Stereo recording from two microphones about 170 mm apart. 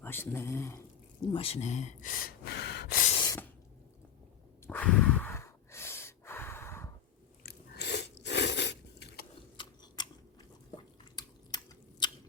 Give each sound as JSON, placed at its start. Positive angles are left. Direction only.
{"t": 0.0, "sound": "speech", "side_deg": 15}
{"t": 1.3, "sound": "gasp", "side_deg": 35}
{"t": 3.2, "sound": "spray", "side_deg": 20}
{"t": 4.6, "sound": "snort", "side_deg": 10}
{"t": 7.4, "sound": "chewing", "side_deg": 80}
{"t": 9.6, "sound": "scissors", "side_deg": 25}
{"t": 11.2, "sound": "scissors", "side_deg": 25}